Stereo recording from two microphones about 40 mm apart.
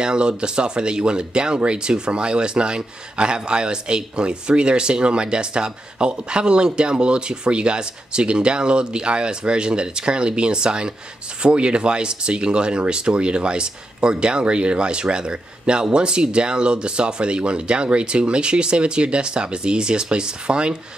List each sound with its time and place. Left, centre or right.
0.0 s speech: right